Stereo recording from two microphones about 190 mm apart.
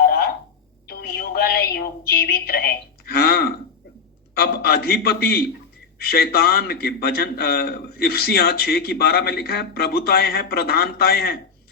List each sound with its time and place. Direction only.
0.0 s alarm clock: 55° left (ahead or behind)
0.9 s a sound: 55° left (ahead or behind)
4.4 s a man's voice: 55° left (ahead or behind)